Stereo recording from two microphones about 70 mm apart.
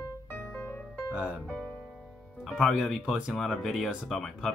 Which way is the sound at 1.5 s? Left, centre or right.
Centre.